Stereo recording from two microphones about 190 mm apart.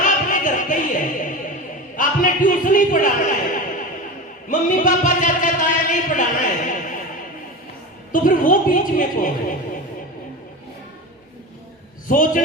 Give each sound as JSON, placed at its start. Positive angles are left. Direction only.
{"t": 0.0, "sound": "music", "side_deg": 45}
{"t": 2.0, "sound": "a man's voice", "side_deg": 45}
{"t": 4.4, "sound": "a sound", "side_deg": 45}
{"t": 8.1, "sound": "a woman's voice", "side_deg": 45}
{"t": 12.0, "sound": "a woman's voice", "side_deg": 45}